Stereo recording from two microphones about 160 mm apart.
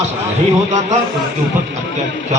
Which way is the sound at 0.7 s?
50° right (ahead or behind).